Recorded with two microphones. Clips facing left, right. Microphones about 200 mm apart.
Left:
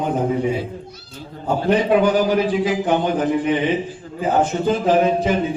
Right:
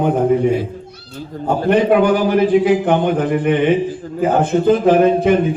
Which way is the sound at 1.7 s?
60° right (ahead or behind).